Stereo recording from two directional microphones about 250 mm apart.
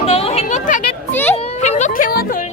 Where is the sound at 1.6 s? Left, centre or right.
Left.